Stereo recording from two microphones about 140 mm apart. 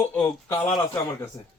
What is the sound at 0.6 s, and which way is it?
Speech, 25° left (ahead or behind).